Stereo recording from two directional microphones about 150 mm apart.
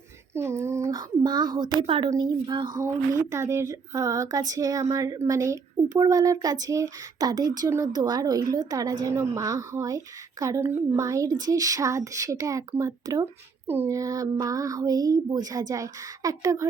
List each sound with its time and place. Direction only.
0.3 s a sound: 20° right (ahead or behind)
0.9 s a woman's voice: 30° right (ahead or behind)
2.7 s speech: 20° right (ahead or behind)